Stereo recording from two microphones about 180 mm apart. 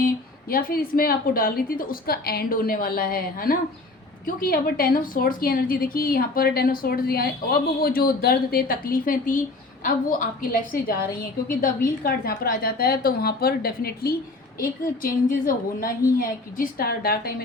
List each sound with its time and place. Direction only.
0.4 s a woman's voice: 55° left (ahead or behind)